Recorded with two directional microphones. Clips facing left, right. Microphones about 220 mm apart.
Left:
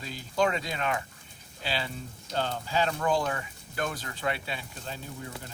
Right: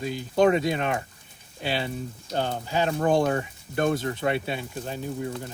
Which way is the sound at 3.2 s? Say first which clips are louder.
Right 8 dB; 35° right (ahead or behind).